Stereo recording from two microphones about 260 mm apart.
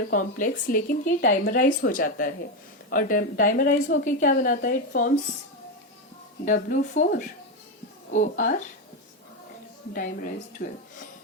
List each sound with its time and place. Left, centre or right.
0.1 s a woman's voice: left
6.4 s a woman's voice: left
9.9 s a woman's voice: left